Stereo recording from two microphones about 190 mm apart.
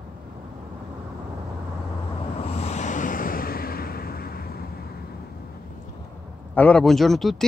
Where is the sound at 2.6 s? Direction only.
35° left (ahead or behind); by 4.6 s 55° left (ahead or behind).